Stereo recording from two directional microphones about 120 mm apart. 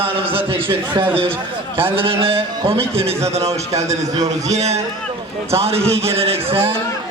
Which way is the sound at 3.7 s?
25° right (ahead or behind).